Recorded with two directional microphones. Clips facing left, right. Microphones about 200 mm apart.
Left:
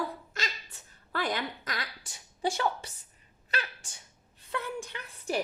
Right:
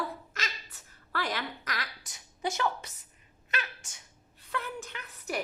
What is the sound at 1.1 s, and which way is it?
A woman's voice, 20° left (ahead or behind).